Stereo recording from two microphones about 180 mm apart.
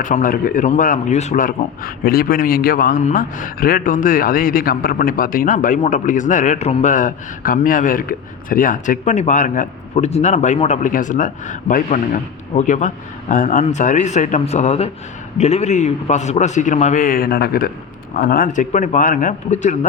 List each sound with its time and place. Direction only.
0.0 s speech: 45° left (ahead or behind)